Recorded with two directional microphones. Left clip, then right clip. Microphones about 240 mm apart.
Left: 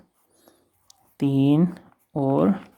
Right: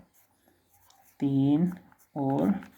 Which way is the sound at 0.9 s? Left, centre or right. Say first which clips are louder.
Left 5 dB; left.